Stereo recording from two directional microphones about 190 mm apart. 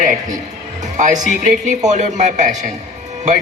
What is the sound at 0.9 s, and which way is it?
A man's voice, 40° right (ahead or behind).